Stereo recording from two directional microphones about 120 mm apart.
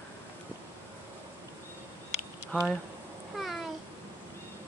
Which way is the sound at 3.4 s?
Centre (ahead or behind).